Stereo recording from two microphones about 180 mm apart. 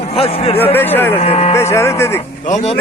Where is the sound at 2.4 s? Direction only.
40° left (ahead or behind).